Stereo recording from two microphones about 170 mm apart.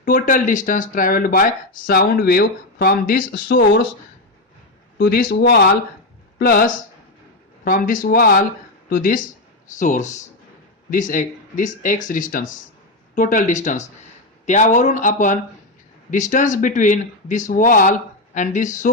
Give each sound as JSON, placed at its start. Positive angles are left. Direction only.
{"t": 0.0, "sound": "speech", "side_deg": 55}
{"t": 4.9, "sound": "speech", "side_deg": 65}
{"t": 6.4, "sound": "speech", "side_deg": 55}